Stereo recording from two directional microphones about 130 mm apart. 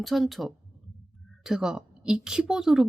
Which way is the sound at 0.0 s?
Centre (ahead or behind).